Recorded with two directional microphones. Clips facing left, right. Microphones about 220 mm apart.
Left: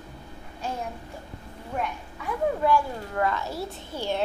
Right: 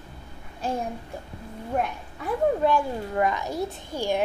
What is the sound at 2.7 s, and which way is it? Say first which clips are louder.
A child's voice: even; 20° right (ahead or behind).